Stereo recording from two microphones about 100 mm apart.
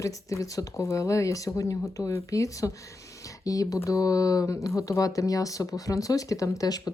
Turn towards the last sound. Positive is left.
turn(degrees=40)  # may be behind; listen again after turning